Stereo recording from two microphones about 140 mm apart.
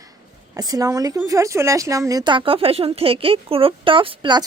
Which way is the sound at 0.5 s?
25° right (ahead or behind).